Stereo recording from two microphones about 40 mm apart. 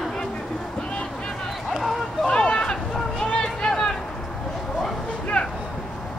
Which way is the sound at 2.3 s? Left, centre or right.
Left.